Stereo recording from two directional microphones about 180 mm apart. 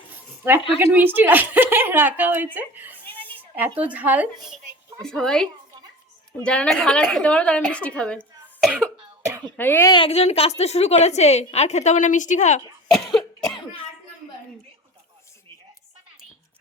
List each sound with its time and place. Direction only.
0.1 s a sound: 10° right (ahead or behind)
0.8 s a woman's voice: 10° right (ahead or behind)
3.1 s a sound: 10° left (ahead or behind)
3.5 s a woman's voice: 10° right (ahead or behind); by 9.9 s 10° left (ahead or behind)
9.9 s a woman's voice: 30° left (ahead or behind)
13.1 s cough: centre (ahead or behind)